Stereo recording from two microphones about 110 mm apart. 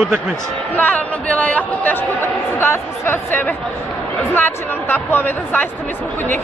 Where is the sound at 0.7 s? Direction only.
15° left (ahead or behind).